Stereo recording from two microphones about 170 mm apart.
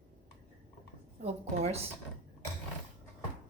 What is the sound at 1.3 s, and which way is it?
Speech, 35° right (ahead or behind).